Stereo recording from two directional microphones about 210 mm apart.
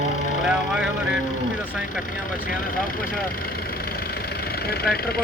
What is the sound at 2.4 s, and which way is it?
Speech, 40° left (ahead or behind).